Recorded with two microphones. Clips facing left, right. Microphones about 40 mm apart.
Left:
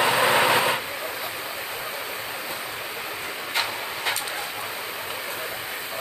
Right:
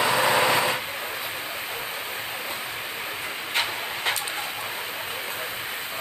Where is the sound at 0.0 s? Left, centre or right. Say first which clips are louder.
Left 1 dB; centre.